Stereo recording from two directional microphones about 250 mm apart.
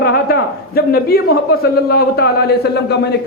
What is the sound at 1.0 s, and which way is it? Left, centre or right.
A man's voice, left.